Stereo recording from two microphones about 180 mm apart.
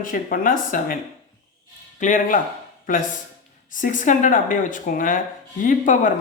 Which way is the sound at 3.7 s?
45° left (ahead or behind).